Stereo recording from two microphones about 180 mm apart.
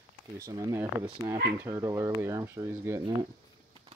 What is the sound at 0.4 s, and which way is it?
Speech, 20° right (ahead or behind).